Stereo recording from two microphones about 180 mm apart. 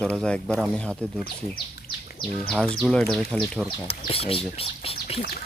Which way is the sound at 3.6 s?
30° left (ahead or behind).